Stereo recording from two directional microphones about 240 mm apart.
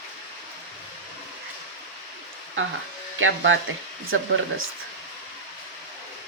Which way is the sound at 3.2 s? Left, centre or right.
Right.